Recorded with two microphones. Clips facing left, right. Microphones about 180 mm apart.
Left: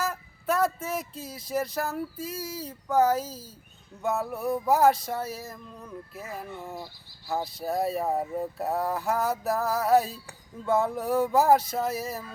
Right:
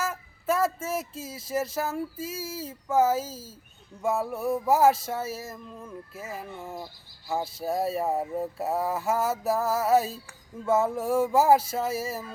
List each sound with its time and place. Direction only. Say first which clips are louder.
0.0 s speech: even; 5° right (ahead or behind)